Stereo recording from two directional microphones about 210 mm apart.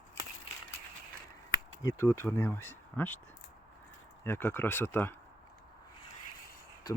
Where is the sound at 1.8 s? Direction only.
10° left (ahead or behind).